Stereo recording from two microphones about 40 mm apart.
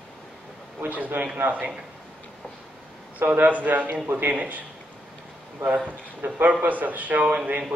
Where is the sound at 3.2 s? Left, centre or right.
Right.